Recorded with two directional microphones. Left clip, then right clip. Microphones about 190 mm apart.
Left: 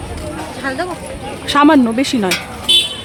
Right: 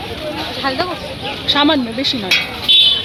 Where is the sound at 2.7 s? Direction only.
75° left (ahead or behind).